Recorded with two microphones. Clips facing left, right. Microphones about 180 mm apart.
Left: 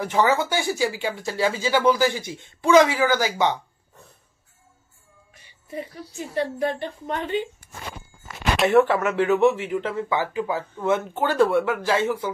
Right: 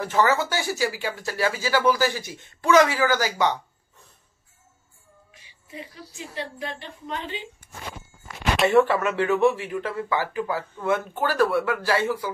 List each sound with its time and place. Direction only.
0.0 s speech: 15° left (ahead or behind)
5.8 s a woman's voice: 50° left (ahead or behind)
8.6 s speech: 15° left (ahead or behind)